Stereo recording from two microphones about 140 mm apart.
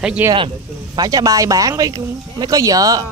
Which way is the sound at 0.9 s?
25° right (ahead or behind).